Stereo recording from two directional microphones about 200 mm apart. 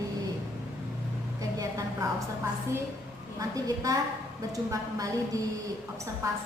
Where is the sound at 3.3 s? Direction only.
15° right (ahead or behind).